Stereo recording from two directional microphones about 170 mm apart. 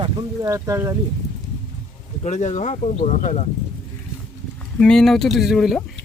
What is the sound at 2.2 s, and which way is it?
Speech, 45° left (ahead or behind).